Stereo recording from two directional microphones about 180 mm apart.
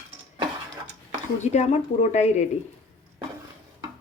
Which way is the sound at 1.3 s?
40° left (ahead or behind).